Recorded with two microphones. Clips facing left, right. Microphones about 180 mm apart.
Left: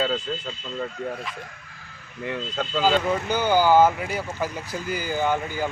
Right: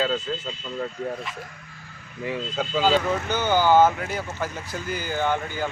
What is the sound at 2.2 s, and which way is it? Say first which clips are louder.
Speech: right 1 dB; 5° right (ahead or behind).